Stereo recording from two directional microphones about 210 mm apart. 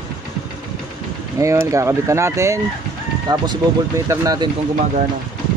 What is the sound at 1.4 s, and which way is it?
Speech, 15° right (ahead or behind).